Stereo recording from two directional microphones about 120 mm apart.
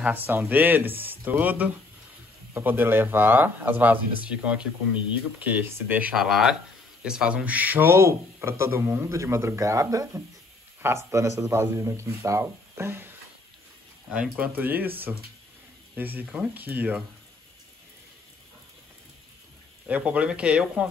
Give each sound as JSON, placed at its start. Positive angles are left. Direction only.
{"t": 0.3, "sound": "a man's voice", "side_deg": -15}
{"t": 14.1, "sound": "speech", "side_deg": -10}
{"t": 19.9, "sound": "speech", "side_deg": -10}